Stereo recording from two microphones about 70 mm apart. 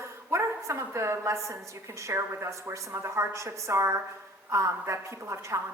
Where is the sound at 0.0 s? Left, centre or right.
Right.